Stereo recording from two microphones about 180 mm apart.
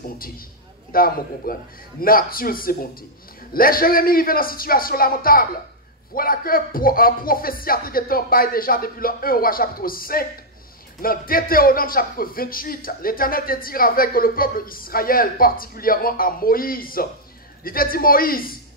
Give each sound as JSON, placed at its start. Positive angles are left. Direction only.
{"t": 0.9, "sound": "a man's voice", "side_deg": 55}